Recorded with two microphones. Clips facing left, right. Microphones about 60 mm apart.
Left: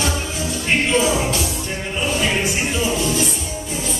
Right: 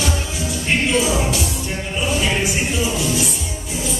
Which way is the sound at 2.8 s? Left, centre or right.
Left.